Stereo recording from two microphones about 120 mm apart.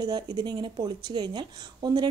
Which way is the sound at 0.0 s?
35° right (ahead or behind).